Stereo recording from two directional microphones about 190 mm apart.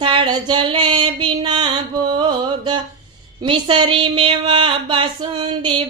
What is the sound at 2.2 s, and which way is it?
Music, 25° right (ahead or behind).